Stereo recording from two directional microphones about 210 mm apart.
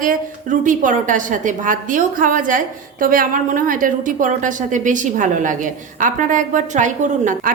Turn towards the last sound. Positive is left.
turn(degrees=-35)  # may be behind; listen again after turning